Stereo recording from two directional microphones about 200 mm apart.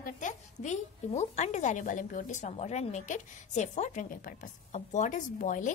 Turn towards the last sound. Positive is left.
turn(degrees=40)  # may be behind; listen again after turning